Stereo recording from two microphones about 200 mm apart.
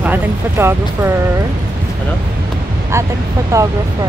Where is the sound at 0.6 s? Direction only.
10° right (ahead or behind).